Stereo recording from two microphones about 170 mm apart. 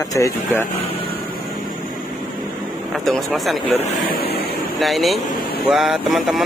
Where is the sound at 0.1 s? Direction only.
15° left (ahead or behind).